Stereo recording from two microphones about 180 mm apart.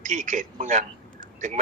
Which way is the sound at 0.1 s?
45° right (ahead or behind).